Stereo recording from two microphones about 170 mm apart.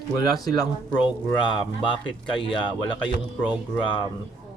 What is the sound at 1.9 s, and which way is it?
Speech, 30° left (ahead or behind).